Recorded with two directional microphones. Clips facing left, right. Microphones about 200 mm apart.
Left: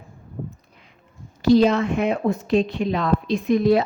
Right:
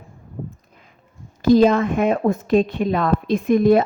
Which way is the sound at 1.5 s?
50° right (ahead or behind).